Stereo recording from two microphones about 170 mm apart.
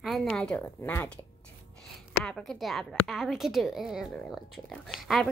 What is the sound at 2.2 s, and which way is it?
A woman's voice, 5° left (ahead or behind).